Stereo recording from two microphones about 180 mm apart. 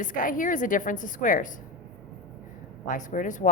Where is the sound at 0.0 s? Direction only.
50° left (ahead or behind).